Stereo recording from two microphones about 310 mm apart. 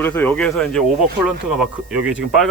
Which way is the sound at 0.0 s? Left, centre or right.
Centre.